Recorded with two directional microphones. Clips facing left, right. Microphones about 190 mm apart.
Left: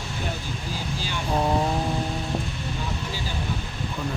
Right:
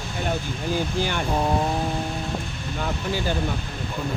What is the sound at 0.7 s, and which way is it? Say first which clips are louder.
Speech: right 8 dB; 60° right (ahead or behind).